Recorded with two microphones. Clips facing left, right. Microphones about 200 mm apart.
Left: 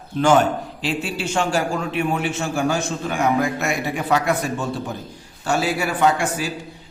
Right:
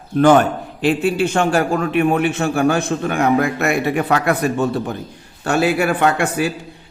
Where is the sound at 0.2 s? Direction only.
55° right (ahead or behind).